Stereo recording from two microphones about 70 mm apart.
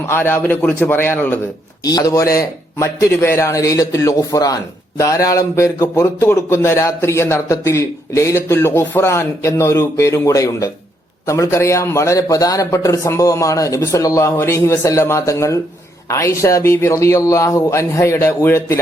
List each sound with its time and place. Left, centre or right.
0.1 s a man's voice: left
1.8 s a man's voice: left
14.3 s a man's voice: left